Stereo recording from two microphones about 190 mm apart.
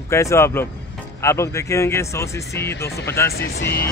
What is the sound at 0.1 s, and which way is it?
Speech, 15° left (ahead or behind).